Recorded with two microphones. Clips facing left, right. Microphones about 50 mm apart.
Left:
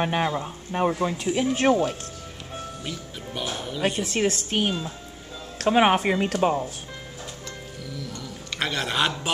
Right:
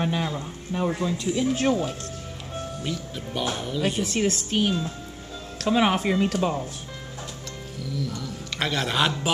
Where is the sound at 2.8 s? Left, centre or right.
Centre.